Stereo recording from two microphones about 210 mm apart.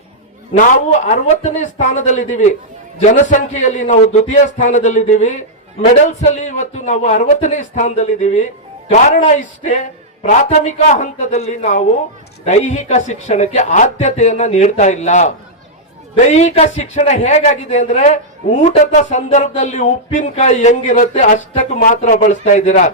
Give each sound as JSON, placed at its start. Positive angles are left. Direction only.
{"t": 0.5, "sound": "a man's voice", "side_deg": 35}